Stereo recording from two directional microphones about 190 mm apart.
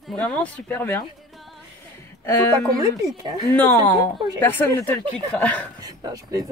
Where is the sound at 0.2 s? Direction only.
5° left (ahead or behind).